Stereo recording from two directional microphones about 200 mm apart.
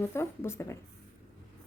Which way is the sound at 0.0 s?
10° left (ahead or behind).